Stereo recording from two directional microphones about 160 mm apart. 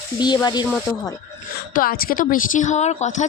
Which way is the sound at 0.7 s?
15° left (ahead or behind).